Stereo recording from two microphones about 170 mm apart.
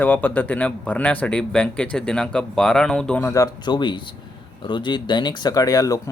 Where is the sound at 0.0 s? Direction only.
10° left (ahead or behind).